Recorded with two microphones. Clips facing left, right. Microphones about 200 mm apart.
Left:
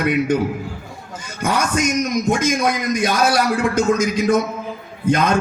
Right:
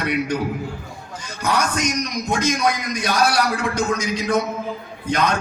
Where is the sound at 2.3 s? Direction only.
50° left (ahead or behind).